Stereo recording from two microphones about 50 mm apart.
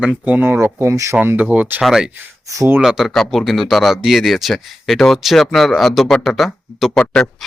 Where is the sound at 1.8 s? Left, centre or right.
Centre.